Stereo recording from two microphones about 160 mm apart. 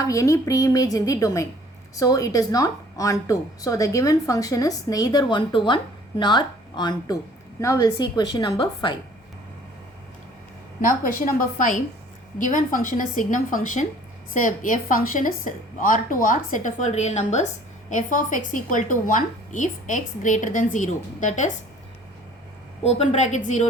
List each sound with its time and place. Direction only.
0.0 s a woman's voice: 20° left (ahead or behind)
10.8 s a woman's voice: 55° left (ahead or behind)
22.8 s a woman's voice: 40° left (ahead or behind)